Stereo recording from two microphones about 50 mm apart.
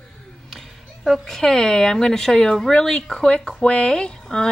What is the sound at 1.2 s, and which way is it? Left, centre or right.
Speech, centre.